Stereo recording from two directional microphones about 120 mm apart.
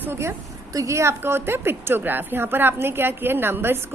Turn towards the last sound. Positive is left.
turn(degrees=-20)  # may be behind; listen again after turning